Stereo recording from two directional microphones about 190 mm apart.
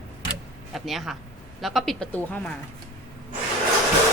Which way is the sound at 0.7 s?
Centre (ahead or behind).